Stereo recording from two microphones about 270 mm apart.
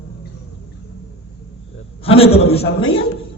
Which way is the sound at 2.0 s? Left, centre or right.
Left.